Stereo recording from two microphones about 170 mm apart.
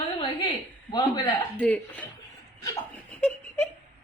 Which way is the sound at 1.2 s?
10° left (ahead or behind).